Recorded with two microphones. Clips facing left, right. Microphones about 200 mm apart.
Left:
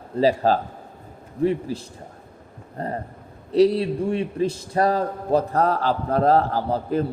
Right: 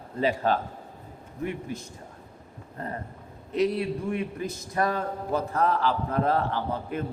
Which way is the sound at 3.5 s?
35° left (ahead or behind).